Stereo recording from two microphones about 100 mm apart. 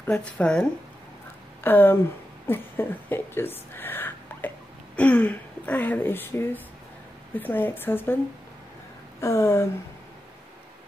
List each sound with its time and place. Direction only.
0.1 s speech: 10° left (ahead or behind)
1.6 s a woman's voice: 20° left (ahead or behind)
9.2 s a woman's voice: 25° left (ahead or behind)